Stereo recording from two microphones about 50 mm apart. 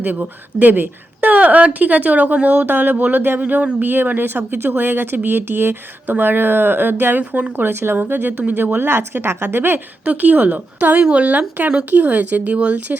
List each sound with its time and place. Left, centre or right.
0.0 s a woman's voice: right
2.6 s a woman's voice: right
3.8 s speech: right
7.2 s speech: right
7.6 s speech: right
10.0 s a woman's voice: right
11.0 s a woman's voice: right